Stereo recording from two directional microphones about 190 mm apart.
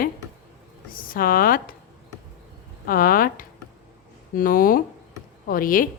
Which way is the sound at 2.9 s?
50° left (ahead or behind).